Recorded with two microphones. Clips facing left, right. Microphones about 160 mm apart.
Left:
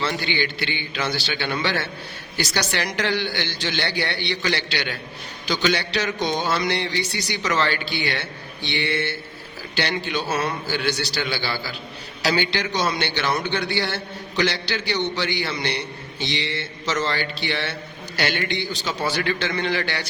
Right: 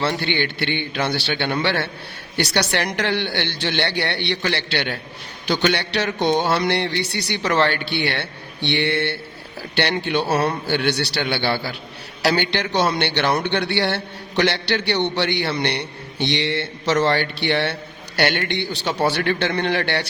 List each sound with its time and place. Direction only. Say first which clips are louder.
0.2 s a man's voice: right 3 dB; 60° right (ahead or behind)
10.2 s a man's voice: right 5 dB; 35° right (ahead or behind)
10.7 s a man's voice: right 4 dB; 65° right (ahead or behind)